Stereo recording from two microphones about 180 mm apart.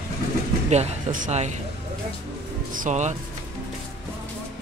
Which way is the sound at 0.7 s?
40° right (ahead or behind).